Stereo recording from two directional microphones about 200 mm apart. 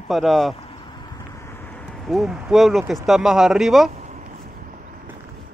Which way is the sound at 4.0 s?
35° right (ahead or behind).